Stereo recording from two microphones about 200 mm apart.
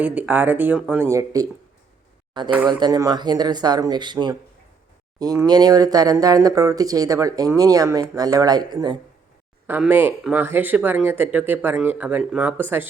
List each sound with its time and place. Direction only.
0.0 s speech: 5° right (ahead or behind)
2.6 s speech: 20° right (ahead or behind)
9.6 s speech: 10° right (ahead or behind)